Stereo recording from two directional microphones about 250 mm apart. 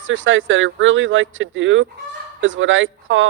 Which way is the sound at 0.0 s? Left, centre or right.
Right.